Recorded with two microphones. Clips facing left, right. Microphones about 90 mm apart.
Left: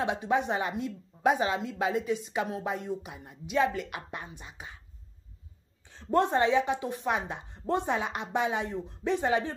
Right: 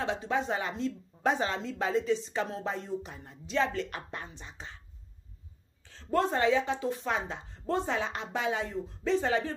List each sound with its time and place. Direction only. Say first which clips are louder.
0.0 s speech: left 3 dB; 20° left (ahead or behind)
5.9 s speech: left 3 dB; 20° left (ahead or behind)